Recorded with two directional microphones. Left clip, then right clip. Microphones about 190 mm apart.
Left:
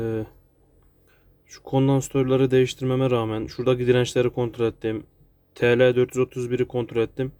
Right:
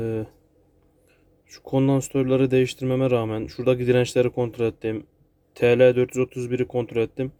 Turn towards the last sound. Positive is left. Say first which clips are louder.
# even
turn(degrees=-5)  # may be behind; listen again after turning